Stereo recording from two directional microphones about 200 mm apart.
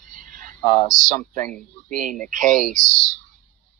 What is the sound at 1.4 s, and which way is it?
Speech, 5° left (ahead or behind).